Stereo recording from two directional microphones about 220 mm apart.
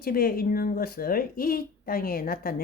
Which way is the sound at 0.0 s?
45° left (ahead or behind).